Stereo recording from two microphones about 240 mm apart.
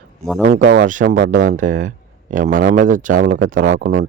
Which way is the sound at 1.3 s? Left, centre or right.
Right.